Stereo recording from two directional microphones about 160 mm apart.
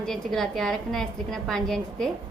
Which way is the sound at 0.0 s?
5° left (ahead or behind).